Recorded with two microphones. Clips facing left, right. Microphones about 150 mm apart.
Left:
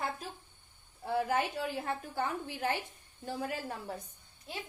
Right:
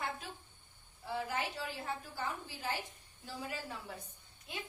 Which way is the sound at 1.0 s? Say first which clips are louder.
Left 7 dB; 55° left (ahead or behind).